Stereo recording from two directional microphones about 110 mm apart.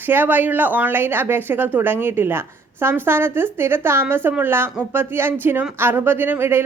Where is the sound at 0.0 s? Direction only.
15° right (ahead or behind).